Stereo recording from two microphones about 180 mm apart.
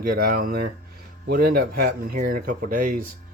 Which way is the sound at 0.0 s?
55° right (ahead or behind).